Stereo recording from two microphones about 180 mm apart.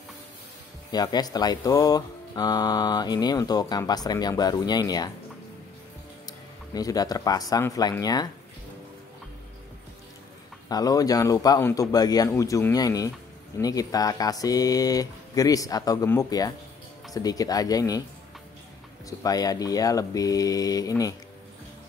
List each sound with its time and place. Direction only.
0.9 s speech: 25° left (ahead or behind)
6.7 s speech: 20° left (ahead or behind)
10.7 s speech: 20° left (ahead or behind)
19.0 s speech: 20° left (ahead or behind)